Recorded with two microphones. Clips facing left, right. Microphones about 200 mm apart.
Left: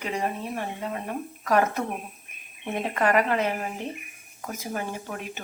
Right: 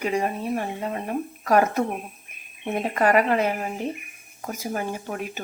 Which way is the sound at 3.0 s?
45° right (ahead or behind).